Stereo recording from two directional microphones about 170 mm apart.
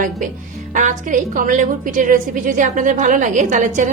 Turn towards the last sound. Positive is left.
turn(degrees=-45)  # may be behind; listen again after turning